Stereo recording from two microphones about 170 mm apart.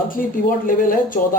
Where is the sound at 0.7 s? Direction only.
55° left (ahead or behind).